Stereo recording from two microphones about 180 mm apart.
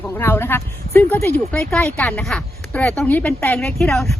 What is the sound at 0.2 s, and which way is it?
Speech, 10° left (ahead or behind).